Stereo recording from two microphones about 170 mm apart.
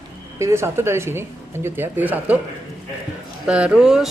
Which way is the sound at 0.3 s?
15° right (ahead or behind).